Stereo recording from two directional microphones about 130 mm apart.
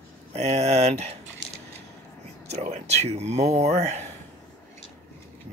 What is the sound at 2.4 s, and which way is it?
Speech, 55° right (ahead or behind).